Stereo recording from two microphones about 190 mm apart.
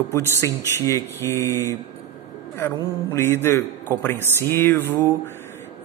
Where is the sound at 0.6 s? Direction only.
15° right (ahead or behind).